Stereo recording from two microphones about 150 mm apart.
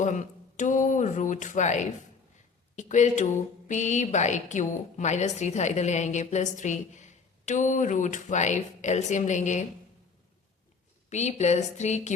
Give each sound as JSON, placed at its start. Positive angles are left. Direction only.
{"t": 0.0, "sound": "a sound", "side_deg": 55}
{"t": 2.7, "sound": "speech", "side_deg": 55}
{"t": 11.1, "sound": "speech", "side_deg": 50}